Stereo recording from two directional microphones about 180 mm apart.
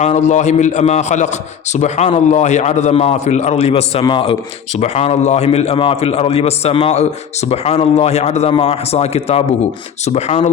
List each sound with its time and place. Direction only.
0.0 s a man's voice: 40° left (ahead or behind)